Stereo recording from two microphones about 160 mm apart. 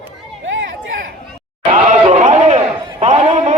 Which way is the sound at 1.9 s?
50° right (ahead or behind).